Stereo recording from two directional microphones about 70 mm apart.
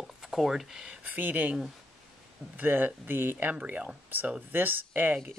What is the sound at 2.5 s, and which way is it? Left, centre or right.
Speech, right.